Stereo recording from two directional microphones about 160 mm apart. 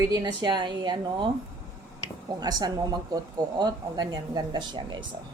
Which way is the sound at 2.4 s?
25° right (ahead or behind).